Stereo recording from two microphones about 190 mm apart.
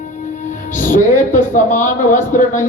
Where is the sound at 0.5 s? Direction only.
45° left (ahead or behind).